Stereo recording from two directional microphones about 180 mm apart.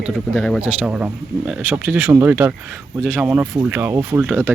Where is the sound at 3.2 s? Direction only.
10° right (ahead or behind).